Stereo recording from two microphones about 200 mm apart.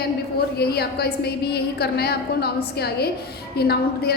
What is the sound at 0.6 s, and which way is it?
A woman's voice, 50° left (ahead or behind).